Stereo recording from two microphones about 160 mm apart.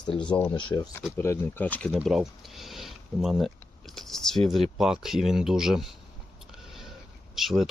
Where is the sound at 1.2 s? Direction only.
15° left (ahead or behind).